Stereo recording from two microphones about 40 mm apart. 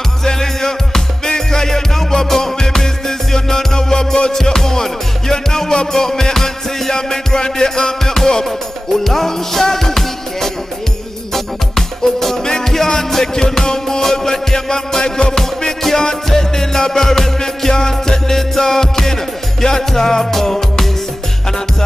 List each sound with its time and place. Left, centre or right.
0.2 s music: centre